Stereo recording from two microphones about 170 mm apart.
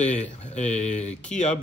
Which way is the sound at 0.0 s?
45° left (ahead or behind).